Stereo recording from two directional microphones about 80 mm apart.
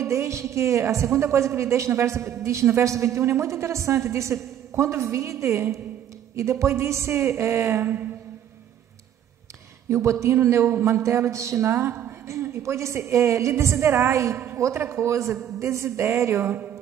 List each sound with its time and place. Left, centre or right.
0.0 s a woman's voice: right
9.8 s a man's voice: right